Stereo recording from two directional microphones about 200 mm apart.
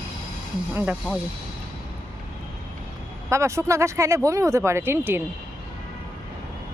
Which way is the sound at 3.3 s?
15° right (ahead or behind).